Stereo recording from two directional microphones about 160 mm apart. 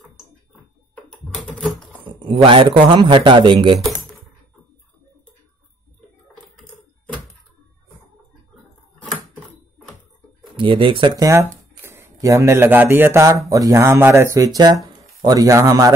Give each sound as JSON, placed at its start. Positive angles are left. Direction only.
{"t": 0.9, "sound": "typing", "side_deg": 5}
{"t": 1.6, "sound": "typewriter", "side_deg": 0}
{"t": 2.0, "sound": "a man's voice", "side_deg": -30}
{"t": 10.5, "sound": "speech", "side_deg": -30}